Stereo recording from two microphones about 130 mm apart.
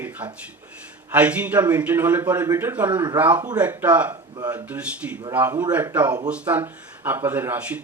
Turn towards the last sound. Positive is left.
turn(degrees=-15)  # may be behind; listen again after turning